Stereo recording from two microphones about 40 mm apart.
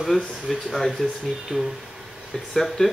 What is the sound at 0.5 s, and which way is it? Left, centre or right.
Speech, centre.